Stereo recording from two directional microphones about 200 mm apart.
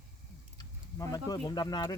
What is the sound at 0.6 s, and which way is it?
Speech, 20° left (ahead or behind).